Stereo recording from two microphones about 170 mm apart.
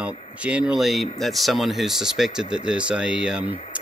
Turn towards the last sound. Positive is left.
turn(degrees=-5)  # may be behind; listen again after turning